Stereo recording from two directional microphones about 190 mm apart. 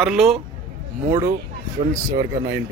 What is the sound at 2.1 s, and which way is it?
Speech, 20° right (ahead or behind).